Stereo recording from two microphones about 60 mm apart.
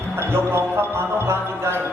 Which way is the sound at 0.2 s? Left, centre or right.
Right.